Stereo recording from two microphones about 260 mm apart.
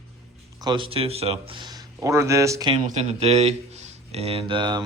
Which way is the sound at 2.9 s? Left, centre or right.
Right.